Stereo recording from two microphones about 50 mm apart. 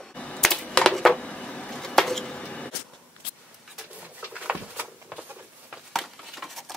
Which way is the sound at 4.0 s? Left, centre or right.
Right.